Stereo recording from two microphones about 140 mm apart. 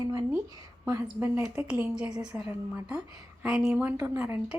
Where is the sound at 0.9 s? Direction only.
25° right (ahead or behind).